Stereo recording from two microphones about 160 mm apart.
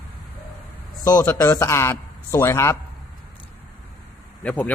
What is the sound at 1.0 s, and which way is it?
A man's voice, 20° left (ahead or behind).